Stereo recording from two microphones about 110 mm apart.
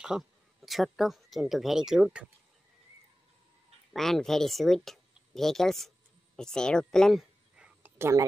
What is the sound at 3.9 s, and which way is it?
Speech, 5° left (ahead or behind).